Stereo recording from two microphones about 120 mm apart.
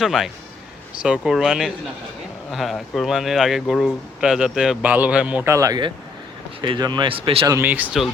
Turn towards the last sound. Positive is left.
turn(degrees=-15)  # may be behind; listen again after turning